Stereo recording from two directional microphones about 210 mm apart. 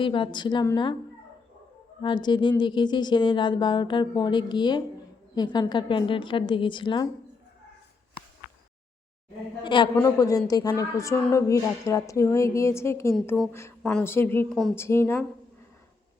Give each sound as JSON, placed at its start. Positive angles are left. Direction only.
{"t": 0.0, "sound": "speech", "side_deg": 25}
{"t": 2.0, "sound": "speech", "side_deg": 20}
{"t": 9.6, "sound": "a woman's voice", "side_deg": 20}